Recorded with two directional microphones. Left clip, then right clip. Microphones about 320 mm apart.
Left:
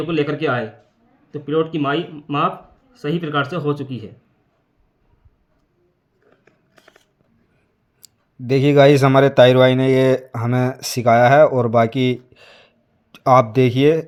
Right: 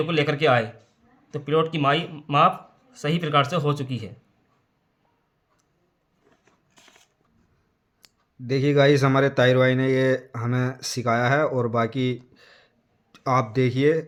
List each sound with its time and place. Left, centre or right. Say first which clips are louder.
0.1 s a man's voice: left 1 dB; right
8.0 s speech: left 7 dB; centre